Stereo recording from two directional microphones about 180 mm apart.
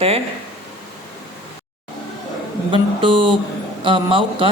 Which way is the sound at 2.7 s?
25° right (ahead or behind).